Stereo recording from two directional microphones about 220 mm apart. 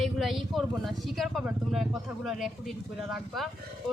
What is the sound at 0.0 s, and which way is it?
Speech, centre (ahead or behind).